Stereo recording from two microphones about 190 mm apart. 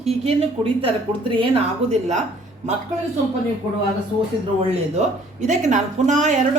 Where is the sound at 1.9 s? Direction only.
35° right (ahead or behind).